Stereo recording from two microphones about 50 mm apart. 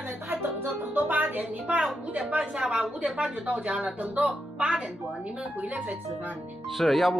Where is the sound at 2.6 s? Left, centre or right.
Centre.